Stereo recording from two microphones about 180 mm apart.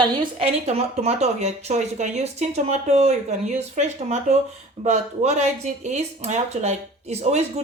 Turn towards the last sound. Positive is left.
turn(degrees=-35)  # may be behind; listen again after turning